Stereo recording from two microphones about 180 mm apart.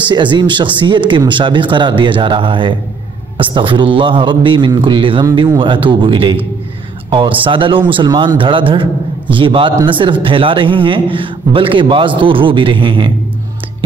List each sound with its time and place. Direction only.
0.1 s speech: 25° right (ahead or behind)